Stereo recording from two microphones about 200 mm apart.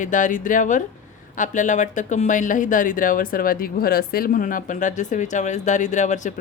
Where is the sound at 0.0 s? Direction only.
40° left (ahead or behind).